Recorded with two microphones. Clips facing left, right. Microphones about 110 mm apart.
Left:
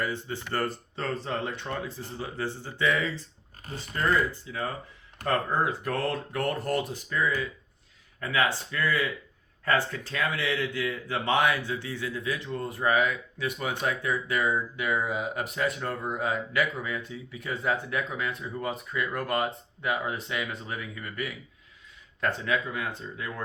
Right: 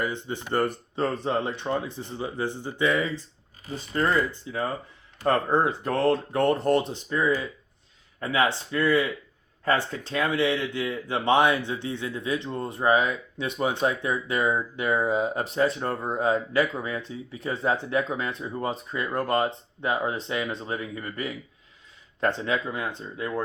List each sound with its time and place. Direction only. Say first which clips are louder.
0.0 s speech: right 2 dB; 20° right (ahead or behind)
3.9 s speech: right 2 dB; 30° right (ahead or behind)